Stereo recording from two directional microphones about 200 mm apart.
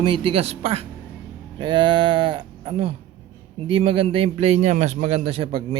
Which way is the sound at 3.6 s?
25° right (ahead or behind).